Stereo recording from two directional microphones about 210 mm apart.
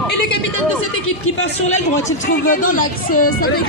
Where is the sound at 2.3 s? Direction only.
40° left (ahead or behind).